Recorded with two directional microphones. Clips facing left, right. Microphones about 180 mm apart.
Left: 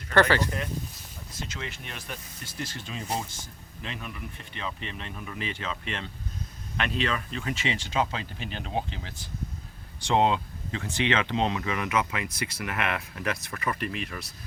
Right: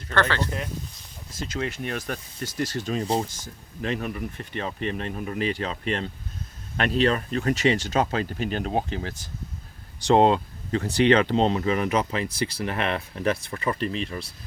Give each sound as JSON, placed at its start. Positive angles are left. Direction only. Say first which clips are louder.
{"t": 0.1, "sound": "speech", "louder": "left 2 dB", "side_deg": 10}
{"t": 1.5, "sound": "speech", "louder": "right 15 dB", "side_deg": -45}
{"t": 3.8, "sound": "speech", "louder": "right 10 dB", "side_deg": -45}